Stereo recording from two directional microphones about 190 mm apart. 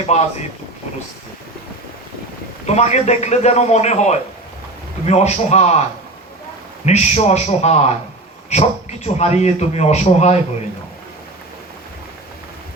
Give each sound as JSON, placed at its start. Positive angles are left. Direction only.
{"t": 0.0, "sound": "speech", "side_deg": 35}
{"t": 2.6, "sound": "speech", "side_deg": 35}
{"t": 6.8, "sound": "speech", "side_deg": 35}